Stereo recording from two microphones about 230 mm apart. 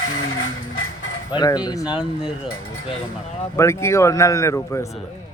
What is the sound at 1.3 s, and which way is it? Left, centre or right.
Speech, centre.